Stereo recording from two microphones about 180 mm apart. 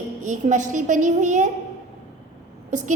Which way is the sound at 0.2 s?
45° right (ahead or behind).